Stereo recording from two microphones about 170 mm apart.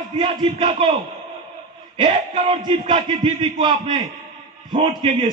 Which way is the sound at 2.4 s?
30° right (ahead or behind).